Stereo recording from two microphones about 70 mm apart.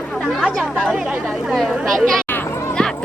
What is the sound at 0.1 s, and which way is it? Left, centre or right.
Chatter, centre.